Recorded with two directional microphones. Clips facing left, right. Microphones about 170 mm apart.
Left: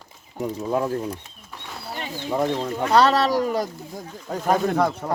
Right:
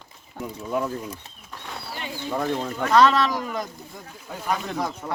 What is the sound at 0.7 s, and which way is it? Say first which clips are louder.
Speech: left 2 dB; 40° left (ahead or behind).